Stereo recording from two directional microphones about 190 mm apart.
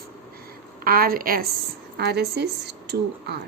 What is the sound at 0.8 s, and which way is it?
A woman's voice, 50° right (ahead or behind).